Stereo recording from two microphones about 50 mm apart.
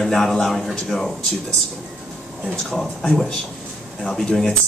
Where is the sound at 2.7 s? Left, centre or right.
Centre.